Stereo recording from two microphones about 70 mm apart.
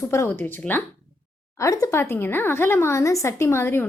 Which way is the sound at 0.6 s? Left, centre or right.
Centre.